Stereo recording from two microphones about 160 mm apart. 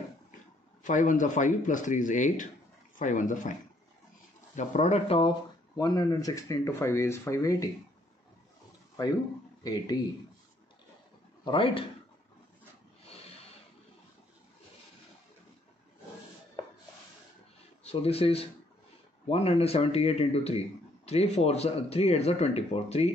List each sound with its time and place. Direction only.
0.8 s speech: 55° left (ahead or behind)
4.6 s speech: 45° left (ahead or behind)
5.8 s speech: 25° left (ahead or behind)
9.6 s speech: 25° left (ahead or behind)
11.4 s speech: 35° left (ahead or behind)
13.0 s snort: 40° left (ahead or behind)
17.8 s speech: 40° left (ahead or behind)